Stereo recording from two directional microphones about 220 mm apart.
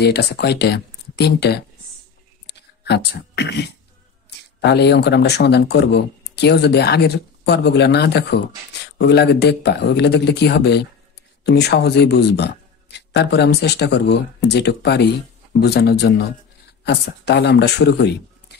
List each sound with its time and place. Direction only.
0.0 s speech: 50° left (ahead or behind)
2.4 s a sound: 50° left (ahead or behind)
4.6 s speech: 50° left (ahead or behind)